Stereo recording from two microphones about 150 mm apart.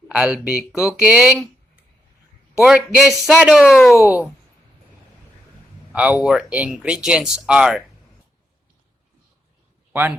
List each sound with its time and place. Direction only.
0.1 s speech: 5° right (ahead or behind)
2.6 s speech: 5° right (ahead or behind)
3.9 s speech: 20° left (ahead or behind)
5.9 s speech: 10° right (ahead or behind)
9.9 s a man's voice: 10° right (ahead or behind)